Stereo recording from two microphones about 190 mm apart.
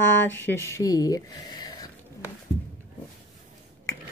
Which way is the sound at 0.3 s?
15° left (ahead or behind).